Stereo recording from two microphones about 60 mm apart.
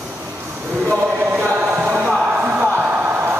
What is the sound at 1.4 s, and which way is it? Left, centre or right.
Chant, right.